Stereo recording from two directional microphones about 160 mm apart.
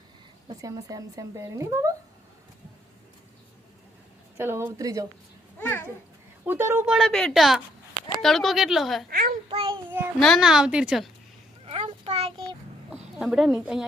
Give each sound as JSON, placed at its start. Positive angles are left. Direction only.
{"t": 0.4, "sound": "a woman's voice", "side_deg": -20}
{"t": 4.4, "sound": "a woman's voice", "side_deg": -15}
{"t": 5.5, "sound": "a child's voice", "side_deg": 10}
{"t": 6.4, "sound": "speech", "side_deg": -15}
{"t": 6.8, "sound": "a woman's voice", "side_deg": 0}
{"t": 9.0, "sound": "a child's voice", "side_deg": -70}
{"t": 9.5, "sound": "child singing", "side_deg": -35}
{"t": 10.2, "sound": "a woman's voice", "side_deg": 0}
{"t": 11.6, "sound": "a sound", "side_deg": -40}
{"t": 13.1, "sound": "a woman's voice", "side_deg": -5}